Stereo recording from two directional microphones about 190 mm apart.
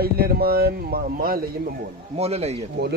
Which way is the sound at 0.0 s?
55° right (ahead or behind).